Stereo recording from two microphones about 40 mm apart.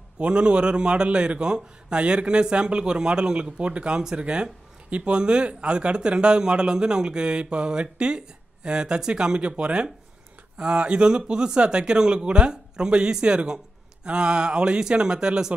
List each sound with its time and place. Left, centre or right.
0.2 s a man's voice: right